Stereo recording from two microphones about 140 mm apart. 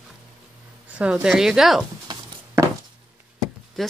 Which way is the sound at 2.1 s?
30° right (ahead or behind).